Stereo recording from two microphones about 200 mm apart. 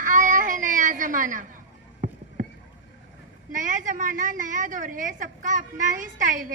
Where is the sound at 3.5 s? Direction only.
40° right (ahead or behind).